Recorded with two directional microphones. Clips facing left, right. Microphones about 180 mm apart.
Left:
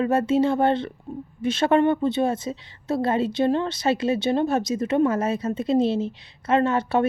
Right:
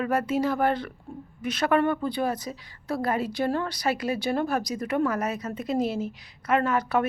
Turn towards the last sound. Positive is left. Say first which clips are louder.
# left 4 dB
turn(degrees=25)  # may be behind; listen again after turning